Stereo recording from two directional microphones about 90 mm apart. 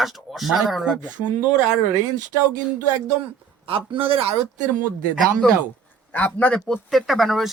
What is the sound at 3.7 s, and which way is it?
Speech, 90° right.